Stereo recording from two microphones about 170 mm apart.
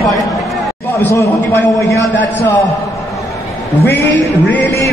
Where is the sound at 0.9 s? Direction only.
15° left (ahead or behind).